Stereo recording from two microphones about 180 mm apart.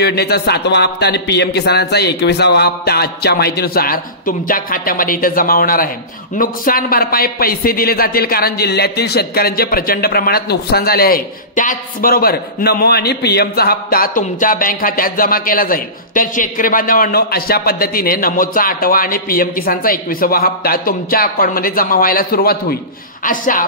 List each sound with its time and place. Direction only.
0.0 s a man's voice: 65° left (ahead or behind); by 23.6 s 50° left (ahead or behind)